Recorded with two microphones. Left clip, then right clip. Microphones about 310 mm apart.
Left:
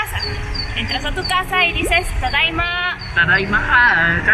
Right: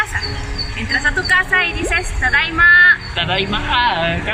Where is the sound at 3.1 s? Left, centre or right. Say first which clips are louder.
Left 4 dB; centre.